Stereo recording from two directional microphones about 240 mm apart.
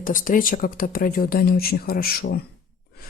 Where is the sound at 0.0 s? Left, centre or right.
Left.